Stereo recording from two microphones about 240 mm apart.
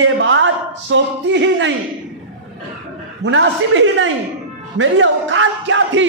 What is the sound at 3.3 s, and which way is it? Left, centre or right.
Speech, right.